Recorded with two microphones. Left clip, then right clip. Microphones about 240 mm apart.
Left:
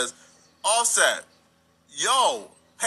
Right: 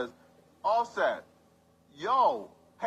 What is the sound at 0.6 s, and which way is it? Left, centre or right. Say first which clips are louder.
A man's voice: left 6 dB; left.